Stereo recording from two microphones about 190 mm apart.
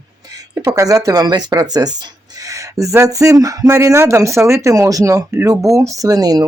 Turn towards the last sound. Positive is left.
turn(degrees=-20)  # may be behind; listen again after turning